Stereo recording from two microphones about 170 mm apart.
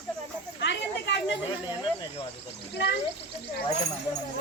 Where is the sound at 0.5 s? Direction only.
90° left.